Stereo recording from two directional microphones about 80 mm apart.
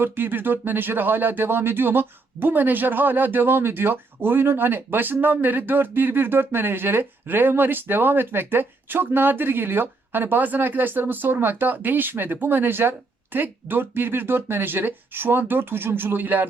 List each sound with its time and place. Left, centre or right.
0.0 s speech: right